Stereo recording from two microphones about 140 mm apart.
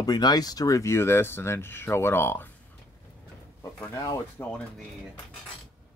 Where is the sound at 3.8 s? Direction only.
20° left (ahead or behind).